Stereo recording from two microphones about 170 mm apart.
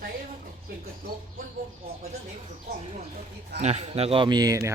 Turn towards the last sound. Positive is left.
turn(degrees=-20)  # may be behind; listen again after turning